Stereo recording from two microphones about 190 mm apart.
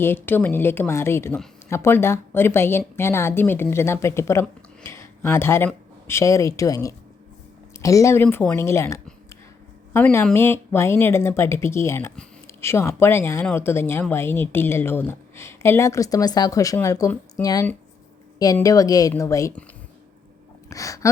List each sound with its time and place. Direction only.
0.0 s a woman's voice: 10° left (ahead or behind)
20.7 s a woman's voice: 15° left (ahead or behind)